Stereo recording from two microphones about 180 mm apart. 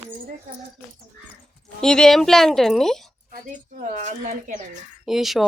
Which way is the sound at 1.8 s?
5° left (ahead or behind).